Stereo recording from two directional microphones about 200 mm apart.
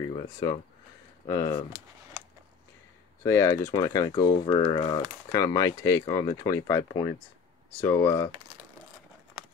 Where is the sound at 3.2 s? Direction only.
15° left (ahead or behind).